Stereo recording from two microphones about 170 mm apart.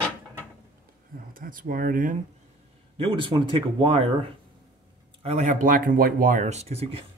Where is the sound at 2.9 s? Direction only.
30° right (ahead or behind).